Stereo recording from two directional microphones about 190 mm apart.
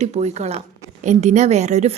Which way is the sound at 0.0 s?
35° right (ahead or behind).